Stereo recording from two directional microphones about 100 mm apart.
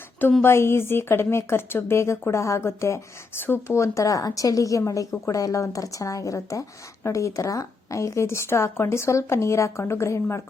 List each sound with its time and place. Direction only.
0.4 s a woman's voice: 25° left (ahead or behind)